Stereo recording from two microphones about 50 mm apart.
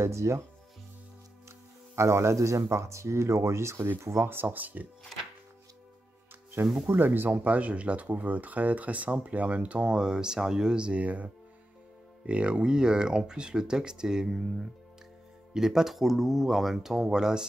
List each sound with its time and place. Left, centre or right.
0.0 s speech: right
2.0 s speech: right
4.3 s speech: right
6.6 s speech: right
7.0 s speech: right
7.4 s speech: right
9.9 s speech: centre